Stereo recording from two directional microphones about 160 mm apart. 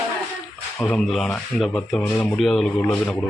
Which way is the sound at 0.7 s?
5° left (ahead or behind).